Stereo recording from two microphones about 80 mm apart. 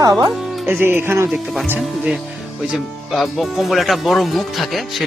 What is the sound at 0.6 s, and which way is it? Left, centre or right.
Speech, right.